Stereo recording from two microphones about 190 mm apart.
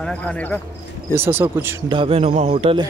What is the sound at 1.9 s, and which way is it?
Speech, 30° right (ahead or behind).